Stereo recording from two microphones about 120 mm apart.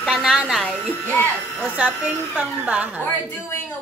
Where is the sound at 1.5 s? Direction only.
10° right (ahead or behind).